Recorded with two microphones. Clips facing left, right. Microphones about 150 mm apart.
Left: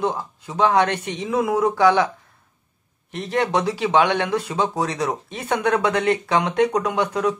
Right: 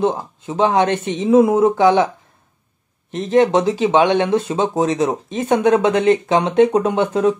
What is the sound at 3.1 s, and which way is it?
Speech, 20° right (ahead or behind).